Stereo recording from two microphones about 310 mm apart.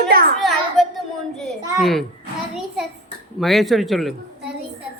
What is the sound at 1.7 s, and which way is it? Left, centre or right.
Speech, centre.